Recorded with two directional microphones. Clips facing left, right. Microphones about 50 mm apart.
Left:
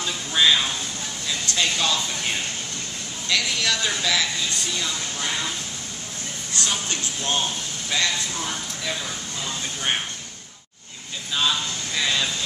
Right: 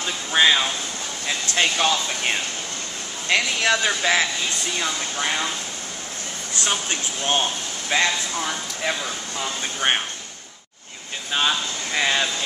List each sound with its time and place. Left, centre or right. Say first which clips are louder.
0.0 s a sound: right 2 dB; right
1.2 s speech: right 3 dB; right
6.6 s speech: right 2 dB; right
11.3 s speech: right 2 dB; right